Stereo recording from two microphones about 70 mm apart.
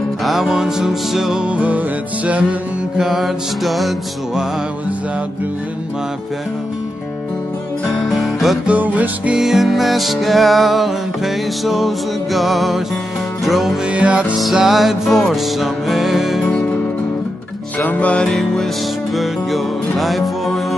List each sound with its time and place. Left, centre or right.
0.2 s music: centre; by 2.4 s right
3.0 s music: centre
8.0 s music: centre
8.6 s music: right
9.4 s music: centre
13.8 s music: centre
14.3 s music: centre
17.7 s music: left
19.1 s music: centre